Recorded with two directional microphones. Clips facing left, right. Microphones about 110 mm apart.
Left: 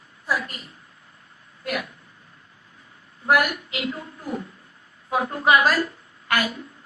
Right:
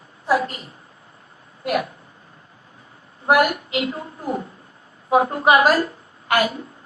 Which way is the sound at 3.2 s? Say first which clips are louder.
Right 4 dB; 30° right (ahead or behind).